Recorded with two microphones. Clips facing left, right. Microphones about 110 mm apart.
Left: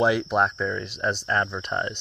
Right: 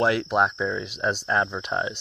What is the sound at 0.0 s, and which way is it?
Speech, centre (ahead or behind).